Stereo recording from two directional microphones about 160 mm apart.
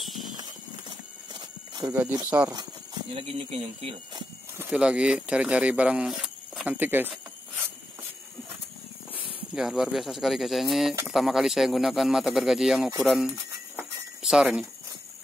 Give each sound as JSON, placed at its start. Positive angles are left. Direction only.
{"t": 0.0, "sound": "horse", "side_deg": 0}
{"t": 0.4, "sound": "horse", "side_deg": -25}
{"t": 2.2, "sound": "speech", "side_deg": -10}
{"t": 2.5, "sound": "speech", "side_deg": -30}
{"t": 4.6, "sound": "speech", "side_deg": -5}
{"t": 9.1, "sound": "speech", "side_deg": -5}
{"t": 13.7, "sound": "a sound", "side_deg": -5}